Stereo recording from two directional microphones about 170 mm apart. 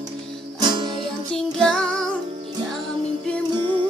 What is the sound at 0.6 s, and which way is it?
Music, 25° right (ahead or behind).